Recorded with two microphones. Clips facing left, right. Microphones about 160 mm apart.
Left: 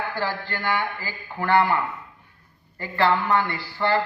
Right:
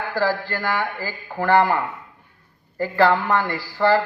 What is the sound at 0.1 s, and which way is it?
Speech, 40° right (ahead or behind).